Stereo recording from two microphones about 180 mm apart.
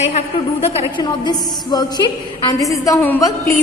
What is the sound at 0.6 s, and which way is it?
A woman's voice, 30° left (ahead or behind).